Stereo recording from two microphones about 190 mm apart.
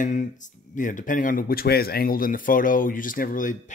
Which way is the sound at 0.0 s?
40° left (ahead or behind).